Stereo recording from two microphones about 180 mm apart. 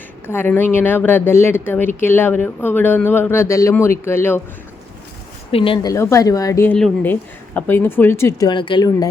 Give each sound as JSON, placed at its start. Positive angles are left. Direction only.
{"t": 0.3, "sound": "a woman's voice", "side_deg": 10}
{"t": 5.5, "sound": "a woman's voice", "side_deg": 30}